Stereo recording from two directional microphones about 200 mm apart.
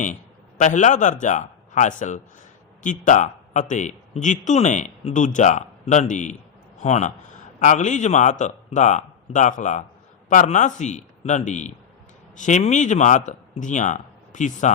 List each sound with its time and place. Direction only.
0.6 s speech: 35° left (ahead or behind)